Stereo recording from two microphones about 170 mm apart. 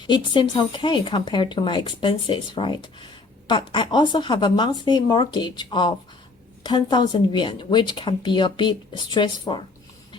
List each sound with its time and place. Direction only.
0.1 s a woman's voice: 25° left (ahead or behind)